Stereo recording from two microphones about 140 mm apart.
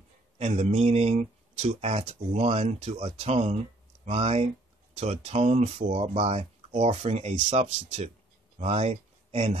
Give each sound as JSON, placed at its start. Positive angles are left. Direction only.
{"t": 0.4, "sound": "speech", "side_deg": -50}